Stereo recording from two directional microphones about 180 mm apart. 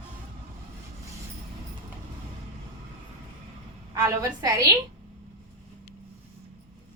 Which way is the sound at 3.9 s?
20° right (ahead or behind).